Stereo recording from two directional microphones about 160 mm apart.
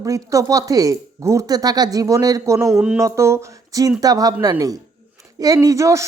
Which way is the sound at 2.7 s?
Centre (ahead or behind).